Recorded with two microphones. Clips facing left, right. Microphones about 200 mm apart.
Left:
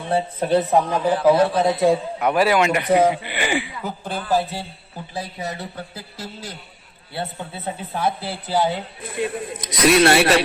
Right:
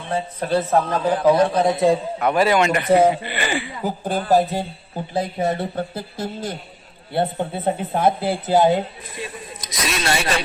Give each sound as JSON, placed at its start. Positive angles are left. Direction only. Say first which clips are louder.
{"t": 0.2, "sound": "a man's voice", "louder": "left 1 dB", "side_deg": 20}
{"t": 1.4, "sound": "a man's voice", "louder": "even", "side_deg": -20}
{"t": 1.6, "sound": "a man's voice", "louder": "even", "side_deg": 0}
{"t": 3.8, "sound": "speech", "louder": "right 5 dB", "side_deg": -35}
{"t": 9.1, "sound": "a man's voice", "louder": "left 9 dB", "side_deg": 65}